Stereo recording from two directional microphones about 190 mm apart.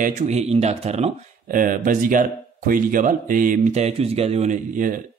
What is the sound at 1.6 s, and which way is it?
Speech, 45° right (ahead or behind).